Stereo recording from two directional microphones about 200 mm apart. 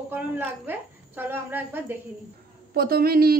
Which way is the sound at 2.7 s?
50° right (ahead or behind).